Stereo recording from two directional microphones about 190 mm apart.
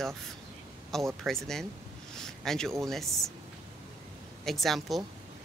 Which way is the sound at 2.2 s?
Centre (ahead or behind).